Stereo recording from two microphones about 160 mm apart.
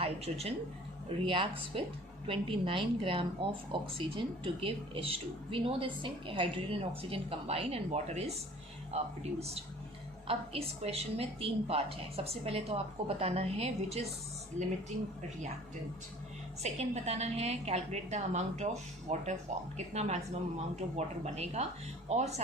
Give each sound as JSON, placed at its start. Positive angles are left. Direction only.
{"t": 0.0, "sound": "speech", "side_deg": -40}
{"t": 10.2, "sound": "speech", "side_deg": -40}
{"t": 16.6, "sound": "a woman's voice", "side_deg": -45}